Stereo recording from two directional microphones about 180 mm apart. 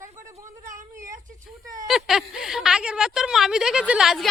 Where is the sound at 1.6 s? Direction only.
20° right (ahead or behind).